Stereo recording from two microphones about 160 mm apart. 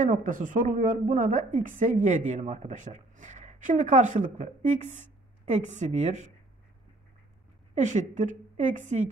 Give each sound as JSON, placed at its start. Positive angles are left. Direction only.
{"t": 0.0, "sound": "a woman's voice", "side_deg": -55}
{"t": 7.7, "sound": "a woman's voice", "side_deg": -50}